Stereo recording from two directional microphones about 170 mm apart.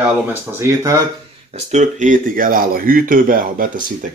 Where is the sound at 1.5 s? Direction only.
45° right (ahead or behind).